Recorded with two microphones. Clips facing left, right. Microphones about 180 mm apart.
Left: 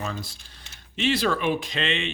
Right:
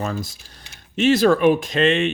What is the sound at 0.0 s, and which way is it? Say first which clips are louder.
Speech: right 6 dB; 45° right (ahead or behind).